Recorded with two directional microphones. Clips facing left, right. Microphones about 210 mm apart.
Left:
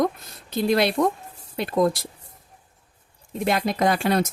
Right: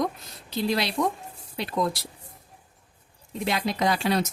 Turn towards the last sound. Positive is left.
turn(degrees=50)  # may be behind; listen again after turning